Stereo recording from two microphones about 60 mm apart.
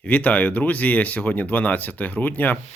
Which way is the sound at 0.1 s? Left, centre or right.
Left.